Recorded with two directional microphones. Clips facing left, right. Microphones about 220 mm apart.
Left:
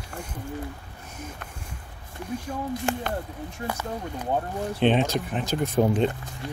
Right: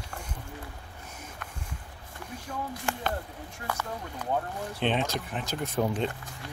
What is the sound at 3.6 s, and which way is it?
Speech, 20° left (ahead or behind).